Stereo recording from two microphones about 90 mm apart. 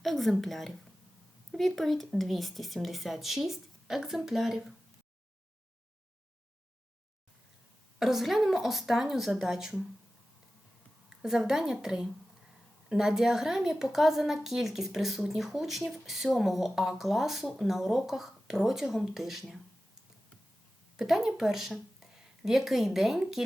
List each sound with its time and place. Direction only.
0.0 s a woman's voice: centre (ahead or behind)
7.9 s a woman's voice: 5° right (ahead or behind)
11.2 s a woman's voice: 5° right (ahead or behind)
20.9 s speech: 5° right (ahead or behind)